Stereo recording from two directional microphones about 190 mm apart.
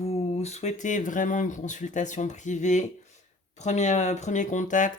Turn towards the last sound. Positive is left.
turn(degrees=40)  # may be behind; listen again after turning